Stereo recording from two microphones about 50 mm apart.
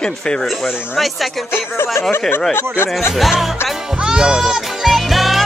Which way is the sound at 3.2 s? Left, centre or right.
Centre.